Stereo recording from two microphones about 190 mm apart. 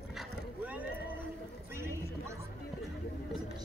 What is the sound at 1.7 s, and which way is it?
Clip-clop, 15° right (ahead or behind).